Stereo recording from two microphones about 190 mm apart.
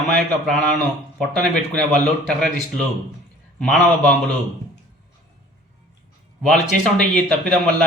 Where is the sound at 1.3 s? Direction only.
5° left (ahead or behind).